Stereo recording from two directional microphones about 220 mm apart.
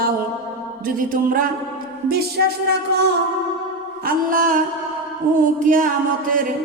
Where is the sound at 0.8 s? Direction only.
40° right (ahead or behind).